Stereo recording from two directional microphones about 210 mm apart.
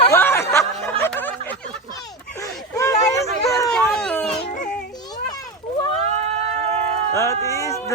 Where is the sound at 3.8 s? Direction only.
5° left (ahead or behind).